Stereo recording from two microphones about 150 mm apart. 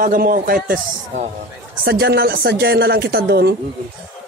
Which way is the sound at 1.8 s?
90° right.